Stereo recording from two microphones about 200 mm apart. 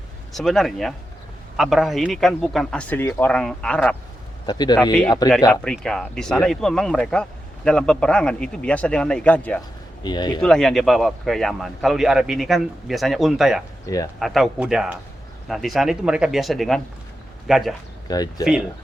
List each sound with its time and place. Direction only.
0.3 s speech: centre (ahead or behind)
4.4 s speech: 20° left (ahead or behind)
5.6 s speech: 5° left (ahead or behind)
10.0 s speech: 20° left (ahead or behind)
10.4 s speech: 5° left (ahead or behind)
13.8 s speech: 15° left (ahead or behind)
14.2 s speech: centre (ahead or behind)
18.1 s speech: 20° left (ahead or behind)